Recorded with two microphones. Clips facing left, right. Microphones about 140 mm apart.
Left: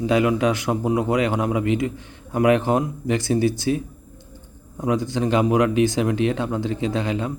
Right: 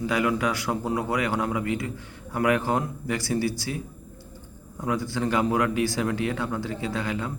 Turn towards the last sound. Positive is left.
turn(degrees=20)  # may be behind; listen again after turning